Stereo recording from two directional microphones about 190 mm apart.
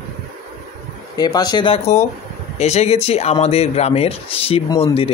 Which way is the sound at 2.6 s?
35° left (ahead or behind).